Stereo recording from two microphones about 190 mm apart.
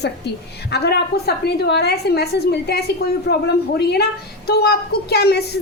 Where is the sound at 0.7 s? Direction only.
60° left (ahead or behind).